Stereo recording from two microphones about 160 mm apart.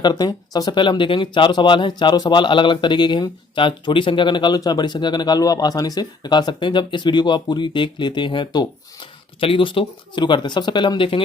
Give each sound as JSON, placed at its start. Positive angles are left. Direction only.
{"t": 0.0, "sound": "speech", "side_deg": 25}